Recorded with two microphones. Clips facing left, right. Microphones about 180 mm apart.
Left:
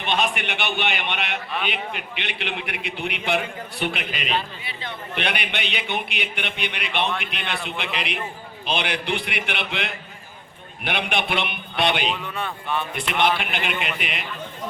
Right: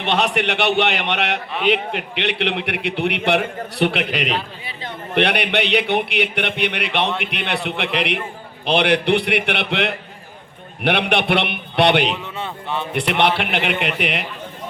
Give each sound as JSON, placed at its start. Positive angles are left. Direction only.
{"t": 0.0, "sound": "a man's voice", "side_deg": -75}
{"t": 4.6, "sound": "a sound", "side_deg": -40}
{"t": 5.1, "sound": "a man's voice", "side_deg": -65}
{"t": 12.1, "sound": "speech", "side_deg": -20}
{"t": 13.1, "sound": "a man's voice", "side_deg": -65}